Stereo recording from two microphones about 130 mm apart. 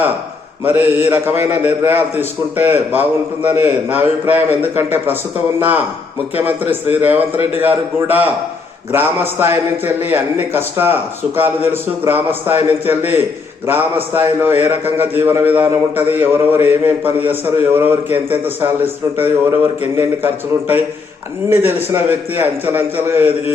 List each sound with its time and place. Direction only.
0.6 s a man's voice: 15° right (ahead or behind)